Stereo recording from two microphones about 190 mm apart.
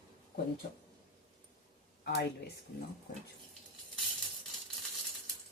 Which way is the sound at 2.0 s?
55° left (ahead or behind).